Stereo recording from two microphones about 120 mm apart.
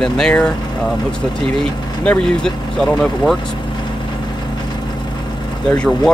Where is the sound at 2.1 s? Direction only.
10° left (ahead or behind).